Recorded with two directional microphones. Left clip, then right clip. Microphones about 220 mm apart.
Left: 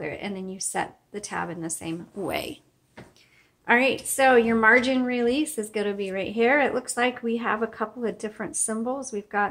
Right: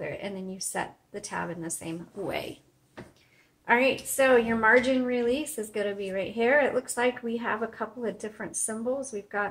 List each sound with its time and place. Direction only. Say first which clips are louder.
0.0 s a woman's voice: left 2 dB; 50° left (ahead or behind)
3.6 s a woman's voice: left 2 dB; 50° left (ahead or behind)